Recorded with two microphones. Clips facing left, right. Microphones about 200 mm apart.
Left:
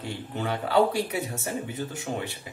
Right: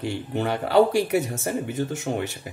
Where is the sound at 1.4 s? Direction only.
80° right.